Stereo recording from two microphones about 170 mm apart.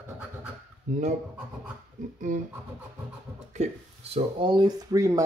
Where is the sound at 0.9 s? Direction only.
45° right (ahead or behind).